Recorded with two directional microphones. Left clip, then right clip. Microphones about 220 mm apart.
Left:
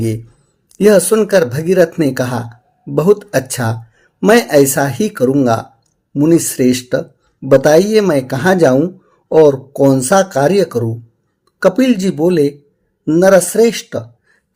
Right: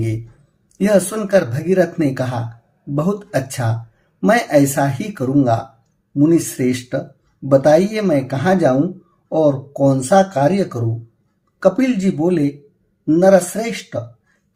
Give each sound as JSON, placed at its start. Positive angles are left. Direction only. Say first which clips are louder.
{"t": 0.8, "sound": "speech", "louder": "left 7 dB", "side_deg": 45}